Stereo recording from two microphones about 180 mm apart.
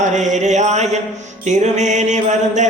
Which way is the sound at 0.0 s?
40° right (ahead or behind).